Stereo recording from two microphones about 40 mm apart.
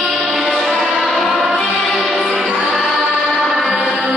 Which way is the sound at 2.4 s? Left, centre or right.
Right.